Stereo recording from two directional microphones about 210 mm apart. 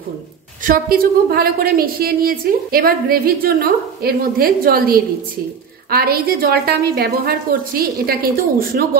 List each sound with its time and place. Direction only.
0.7 s a woman's voice: 45° right (ahead or behind)